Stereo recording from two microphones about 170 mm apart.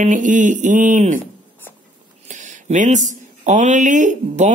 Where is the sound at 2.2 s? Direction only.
45° right (ahead or behind).